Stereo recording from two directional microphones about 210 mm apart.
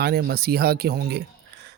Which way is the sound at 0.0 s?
50° right (ahead or behind).